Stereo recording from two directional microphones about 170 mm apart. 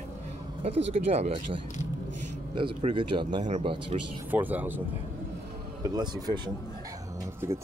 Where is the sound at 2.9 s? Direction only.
25° right (ahead or behind).